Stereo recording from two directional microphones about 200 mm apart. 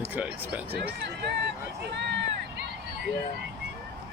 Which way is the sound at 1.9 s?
60° right (ahead or behind).